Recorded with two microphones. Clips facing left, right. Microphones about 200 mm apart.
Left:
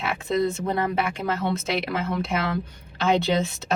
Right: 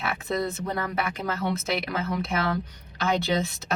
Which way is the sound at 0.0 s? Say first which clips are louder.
Left 4 dB; 30° left (ahead or behind).